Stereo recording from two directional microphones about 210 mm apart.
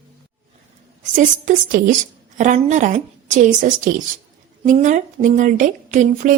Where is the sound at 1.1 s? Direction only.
40° right (ahead or behind).